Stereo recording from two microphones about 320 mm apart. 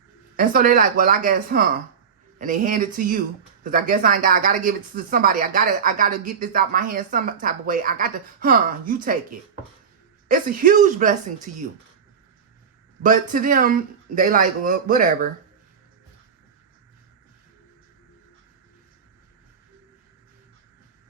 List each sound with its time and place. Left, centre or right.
0.3 s speech: right
10.2 s speech: right
13.0 s speech: right